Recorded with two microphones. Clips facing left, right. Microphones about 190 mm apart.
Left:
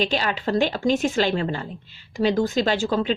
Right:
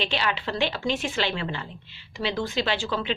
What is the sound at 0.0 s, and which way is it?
A woman's voice, 40° left (ahead or behind).